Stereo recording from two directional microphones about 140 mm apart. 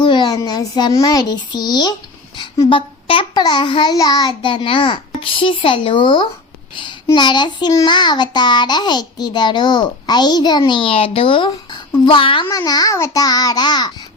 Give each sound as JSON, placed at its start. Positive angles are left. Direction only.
{"t": 0.0, "sound": "a child's voice", "side_deg": 35}
{"t": 12.5, "sound": "a child's voice", "side_deg": 25}